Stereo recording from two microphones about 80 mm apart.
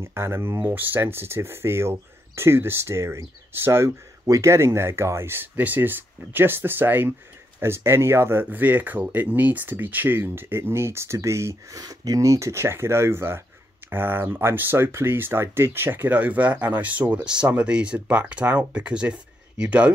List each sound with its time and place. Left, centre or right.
0.0 s speech: right
8.5 s speech: right
11.8 s speech: right; by 19.9 s centre